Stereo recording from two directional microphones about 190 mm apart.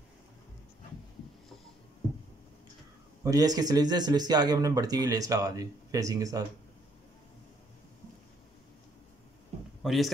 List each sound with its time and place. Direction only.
3.3 s speech: 20° right (ahead or behind)
9.8 s a man's voice: centre (ahead or behind)